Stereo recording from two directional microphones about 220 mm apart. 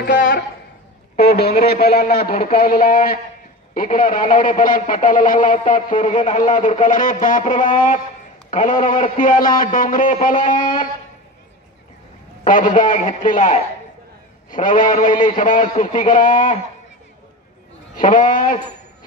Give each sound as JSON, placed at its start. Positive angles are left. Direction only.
{"t": 0.0, "sound": "speech", "side_deg": 40}
{"t": 12.4, "sound": "speech", "side_deg": 35}
{"t": 17.9, "sound": "speech", "side_deg": 35}